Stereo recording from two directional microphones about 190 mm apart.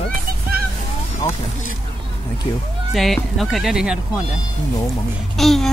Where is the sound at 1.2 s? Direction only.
25° left (ahead or behind).